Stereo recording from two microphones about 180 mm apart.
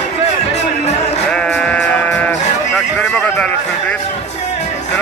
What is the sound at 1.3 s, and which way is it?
Sheep, 5° left (ahead or behind).